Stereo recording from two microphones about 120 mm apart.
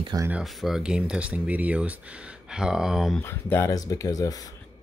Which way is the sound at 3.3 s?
20° left (ahead or behind).